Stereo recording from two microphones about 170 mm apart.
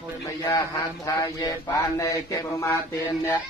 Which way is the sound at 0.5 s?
20° left (ahead or behind).